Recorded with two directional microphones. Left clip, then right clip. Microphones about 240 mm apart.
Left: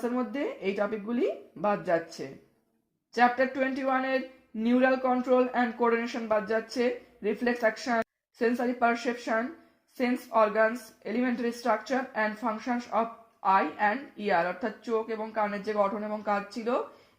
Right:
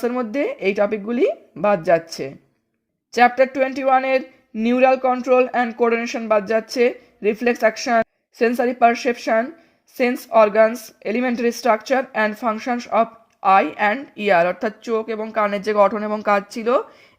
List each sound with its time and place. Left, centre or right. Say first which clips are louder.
0.0 s speech: right 10 dB; right